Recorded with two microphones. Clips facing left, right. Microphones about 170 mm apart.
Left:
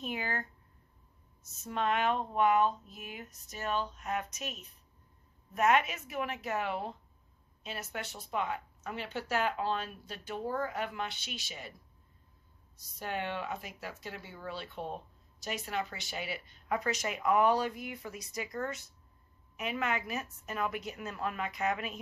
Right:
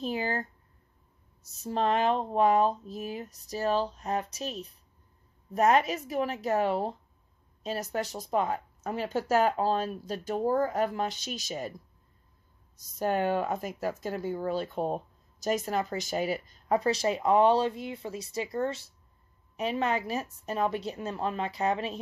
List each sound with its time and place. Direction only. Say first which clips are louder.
0.0 s speech: right 6 dB; 35° right (ahead or behind)
1.5 s speech: right 5 dB; 35° right (ahead or behind)
12.7 s speech: right 9 dB; 45° right (ahead or behind)